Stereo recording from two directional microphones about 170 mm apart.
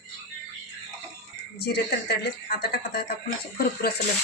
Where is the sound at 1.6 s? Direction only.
70° left (ahead or behind).